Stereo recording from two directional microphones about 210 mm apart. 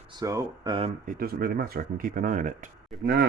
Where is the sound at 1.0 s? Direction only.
45° right (ahead or behind).